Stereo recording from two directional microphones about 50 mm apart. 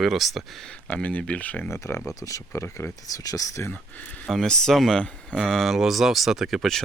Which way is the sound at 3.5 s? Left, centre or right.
Left.